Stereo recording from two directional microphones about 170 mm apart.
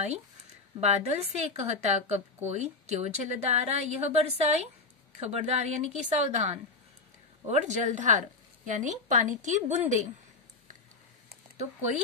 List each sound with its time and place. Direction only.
0.7 s a woman's voice: 40° right (ahead or behind)